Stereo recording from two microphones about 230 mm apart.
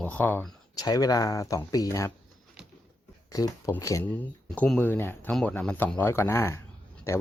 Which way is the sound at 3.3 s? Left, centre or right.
Centre.